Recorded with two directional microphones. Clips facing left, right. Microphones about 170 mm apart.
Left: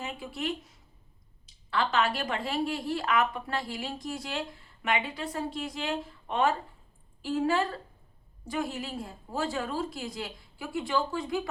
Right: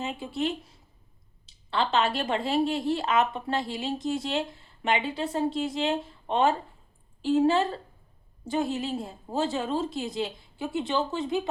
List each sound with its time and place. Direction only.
0.0 s speech: 25° right (ahead or behind)
1.7 s speech: 25° right (ahead or behind)